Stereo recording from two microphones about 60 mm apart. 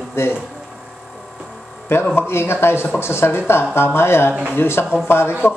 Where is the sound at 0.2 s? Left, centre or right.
Left.